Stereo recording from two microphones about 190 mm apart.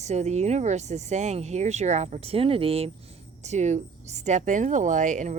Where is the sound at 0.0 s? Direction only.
35° right (ahead or behind).